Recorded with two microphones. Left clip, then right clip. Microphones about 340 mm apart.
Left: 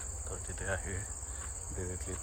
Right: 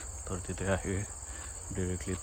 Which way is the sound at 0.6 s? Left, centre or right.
Centre.